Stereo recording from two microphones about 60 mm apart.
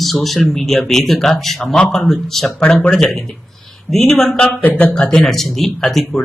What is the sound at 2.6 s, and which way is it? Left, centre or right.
Speech, centre.